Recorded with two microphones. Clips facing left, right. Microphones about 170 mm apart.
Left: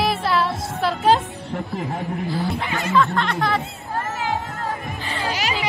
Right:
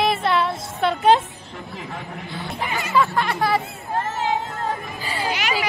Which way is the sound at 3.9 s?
25° right (ahead or behind).